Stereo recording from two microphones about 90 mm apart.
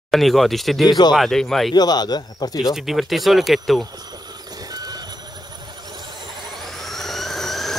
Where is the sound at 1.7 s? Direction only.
50° left (ahead or behind).